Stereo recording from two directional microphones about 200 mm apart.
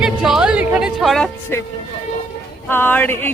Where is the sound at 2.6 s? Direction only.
10° left (ahead or behind).